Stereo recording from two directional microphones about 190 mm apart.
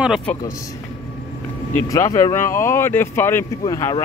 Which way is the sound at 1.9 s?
15° left (ahead or behind).